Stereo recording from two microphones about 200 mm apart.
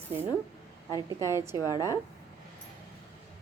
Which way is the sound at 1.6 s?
15° left (ahead or behind).